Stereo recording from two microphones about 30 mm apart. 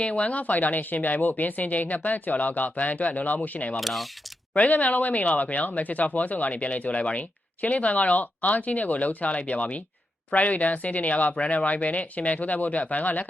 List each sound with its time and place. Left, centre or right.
0.0 s speech: left
2.3 s speech: left
3.8 s speech: centre
4.5 s speech: left